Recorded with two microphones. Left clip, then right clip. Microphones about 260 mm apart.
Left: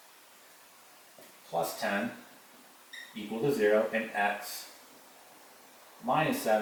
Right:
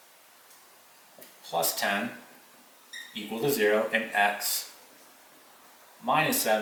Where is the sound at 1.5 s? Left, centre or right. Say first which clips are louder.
Right 4 dB; centre.